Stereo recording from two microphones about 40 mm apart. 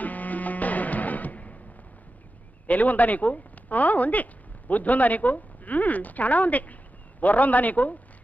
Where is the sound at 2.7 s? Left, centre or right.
Left.